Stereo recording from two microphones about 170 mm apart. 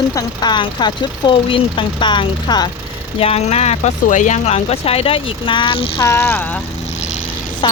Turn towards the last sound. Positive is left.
turn(degrees=30)  # may be behind; listen again after turning